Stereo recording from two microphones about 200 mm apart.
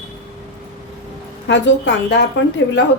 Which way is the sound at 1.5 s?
65° left (ahead or behind).